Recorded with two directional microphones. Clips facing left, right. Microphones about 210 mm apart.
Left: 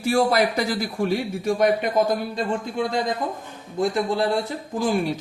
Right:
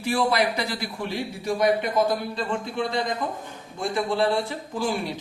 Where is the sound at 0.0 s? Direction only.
45° left (ahead or behind).